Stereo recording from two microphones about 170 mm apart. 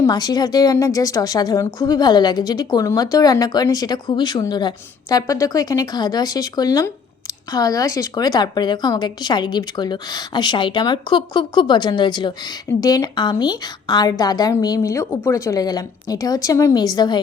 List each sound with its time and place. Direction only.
0.0 s a woman's voice: 25° left (ahead or behind)